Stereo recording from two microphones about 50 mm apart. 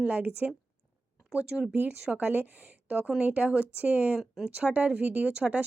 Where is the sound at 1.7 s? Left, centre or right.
Right.